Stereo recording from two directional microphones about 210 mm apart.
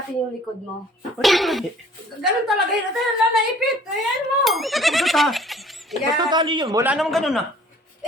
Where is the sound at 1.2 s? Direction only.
Centre (ahead or behind).